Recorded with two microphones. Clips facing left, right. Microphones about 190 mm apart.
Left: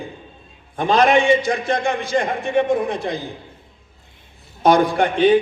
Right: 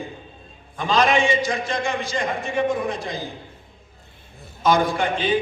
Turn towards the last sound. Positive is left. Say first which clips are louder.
# left 7 dB
turn(degrees=60)  # may be behind; listen again after turning